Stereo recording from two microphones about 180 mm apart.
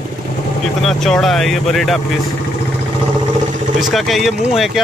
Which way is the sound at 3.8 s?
Centre (ahead or behind).